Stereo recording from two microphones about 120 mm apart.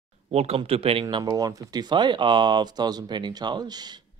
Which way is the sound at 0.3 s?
60° right (ahead or behind).